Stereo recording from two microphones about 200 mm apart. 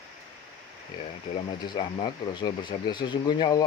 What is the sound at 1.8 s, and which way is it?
Speech, 20° left (ahead or behind).